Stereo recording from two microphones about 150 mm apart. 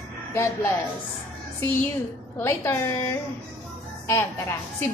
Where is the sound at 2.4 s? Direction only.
15° left (ahead or behind).